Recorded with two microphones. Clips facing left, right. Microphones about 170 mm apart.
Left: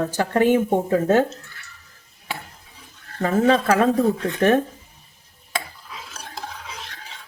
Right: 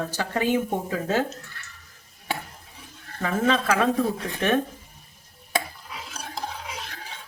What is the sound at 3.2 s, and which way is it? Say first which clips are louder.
Speech: left 5 dB; 40° left (ahead or behind).